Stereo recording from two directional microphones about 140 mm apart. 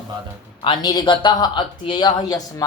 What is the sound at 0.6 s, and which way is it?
Speech, 30° left (ahead or behind).